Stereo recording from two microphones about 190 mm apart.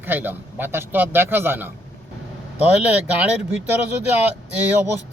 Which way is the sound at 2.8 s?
10° right (ahead or behind).